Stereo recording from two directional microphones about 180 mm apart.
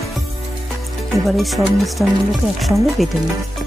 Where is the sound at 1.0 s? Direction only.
Centre (ahead or behind).